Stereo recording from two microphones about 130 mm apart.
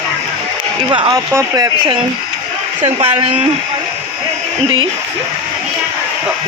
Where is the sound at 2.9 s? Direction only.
45° right (ahead or behind).